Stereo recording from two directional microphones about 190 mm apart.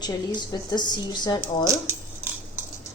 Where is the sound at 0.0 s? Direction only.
25° left (ahead or behind).